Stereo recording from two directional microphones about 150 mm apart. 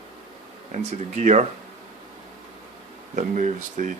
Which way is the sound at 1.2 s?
50° right (ahead or behind).